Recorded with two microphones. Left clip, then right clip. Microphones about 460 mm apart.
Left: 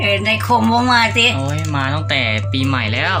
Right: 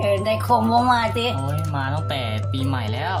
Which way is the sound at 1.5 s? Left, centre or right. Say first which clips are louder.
Left 6 dB; right.